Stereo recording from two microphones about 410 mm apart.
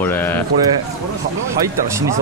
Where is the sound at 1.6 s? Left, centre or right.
Centre.